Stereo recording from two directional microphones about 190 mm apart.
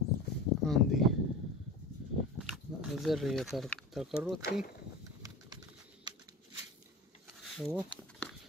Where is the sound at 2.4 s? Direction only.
Centre (ahead or behind).